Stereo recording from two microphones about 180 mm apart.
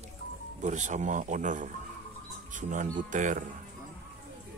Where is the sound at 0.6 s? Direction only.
40° right (ahead or behind).